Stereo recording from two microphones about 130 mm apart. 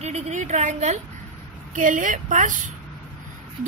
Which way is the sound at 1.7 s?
90° right.